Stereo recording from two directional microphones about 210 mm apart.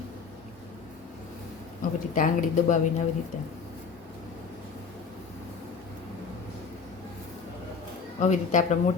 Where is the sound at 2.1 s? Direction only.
40° left (ahead or behind).